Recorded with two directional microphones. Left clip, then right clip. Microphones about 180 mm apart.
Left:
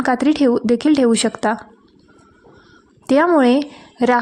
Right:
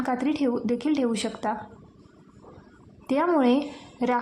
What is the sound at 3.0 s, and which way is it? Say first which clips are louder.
A woman's voice: left 9 dB; 40° left (ahead or behind).